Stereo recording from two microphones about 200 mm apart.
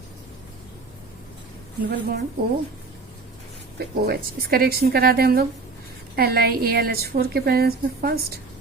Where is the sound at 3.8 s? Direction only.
50° right (ahead or behind).